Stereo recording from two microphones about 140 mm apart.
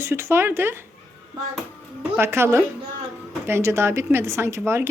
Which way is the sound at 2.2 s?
20° right (ahead or behind).